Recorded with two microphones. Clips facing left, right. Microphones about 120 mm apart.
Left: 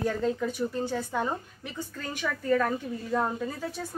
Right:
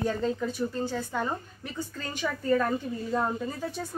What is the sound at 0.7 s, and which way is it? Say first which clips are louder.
A woman's voice: left 1 dB; 15° left (ahead or behind).